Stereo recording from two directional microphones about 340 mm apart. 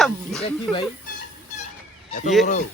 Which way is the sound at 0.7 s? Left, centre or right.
Centre.